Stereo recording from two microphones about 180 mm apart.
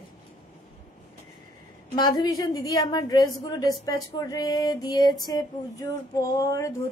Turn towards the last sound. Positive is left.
turn(degrees=15)  # may be behind; listen again after turning